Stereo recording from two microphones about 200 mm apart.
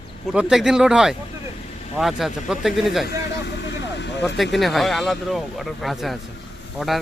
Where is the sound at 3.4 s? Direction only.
60° left (ahead or behind).